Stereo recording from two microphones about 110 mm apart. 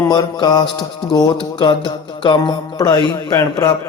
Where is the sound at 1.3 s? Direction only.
45° left (ahead or behind).